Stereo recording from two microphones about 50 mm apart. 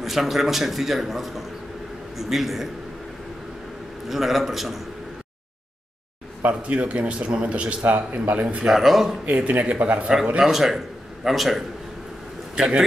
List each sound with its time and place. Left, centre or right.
0.0 s a man's voice: centre
4.1 s a man's voice: centre
6.4 s a man's voice: right
8.6 s a man's voice: centre
9.2 s a man's voice: right
10.4 s a man's voice: centre
12.5 s a man's voice: centre